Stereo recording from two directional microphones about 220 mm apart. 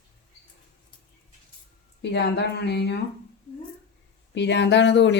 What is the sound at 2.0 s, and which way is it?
Speech, 50° left (ahead or behind).